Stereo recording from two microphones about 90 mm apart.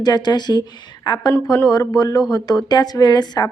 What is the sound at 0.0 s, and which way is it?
A woman's voice, 50° left (ahead or behind).